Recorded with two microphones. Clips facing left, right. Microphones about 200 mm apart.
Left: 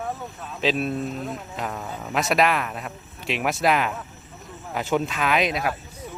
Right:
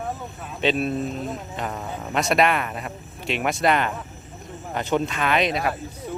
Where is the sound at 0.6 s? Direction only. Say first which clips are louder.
Right 1 dB; centre (ahead or behind).